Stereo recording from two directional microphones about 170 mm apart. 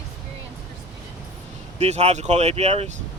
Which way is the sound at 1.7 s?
40° right (ahead or behind).